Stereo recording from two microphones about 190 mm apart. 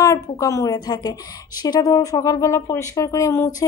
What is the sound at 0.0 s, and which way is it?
A woman's voice, 15° left (ahead or behind).